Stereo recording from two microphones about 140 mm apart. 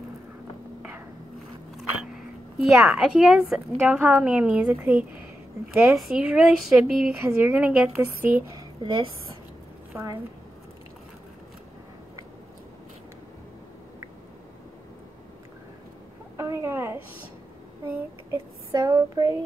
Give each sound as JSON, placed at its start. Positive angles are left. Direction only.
{"t": 1.8, "sound": "speech", "side_deg": 0}
{"t": 7.2, "sound": "a woman's voice", "side_deg": -15}
{"t": 8.5, "sound": "a woman's voice", "side_deg": -35}
{"t": 16.3, "sound": "a woman's voice", "side_deg": -20}
{"t": 18.7, "sound": "speech", "side_deg": -30}